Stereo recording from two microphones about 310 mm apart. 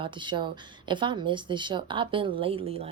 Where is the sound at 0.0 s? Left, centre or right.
Centre.